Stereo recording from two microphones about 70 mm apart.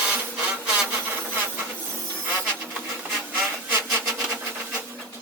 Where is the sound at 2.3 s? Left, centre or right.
Right.